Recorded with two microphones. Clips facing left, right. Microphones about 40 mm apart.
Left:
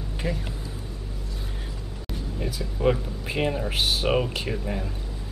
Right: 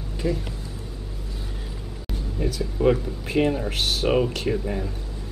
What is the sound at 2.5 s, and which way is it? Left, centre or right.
Speech, centre.